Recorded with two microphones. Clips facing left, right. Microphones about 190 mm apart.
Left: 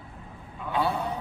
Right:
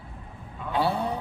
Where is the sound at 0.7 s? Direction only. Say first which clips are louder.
Right 2 dB; 30° right (ahead or behind).